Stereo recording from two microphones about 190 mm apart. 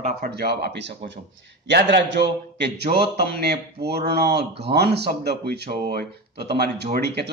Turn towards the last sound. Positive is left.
turn(degrees=-60)  # may be behind; listen again after turning